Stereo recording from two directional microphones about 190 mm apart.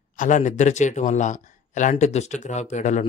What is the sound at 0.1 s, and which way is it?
Speech, 40° left (ahead or behind).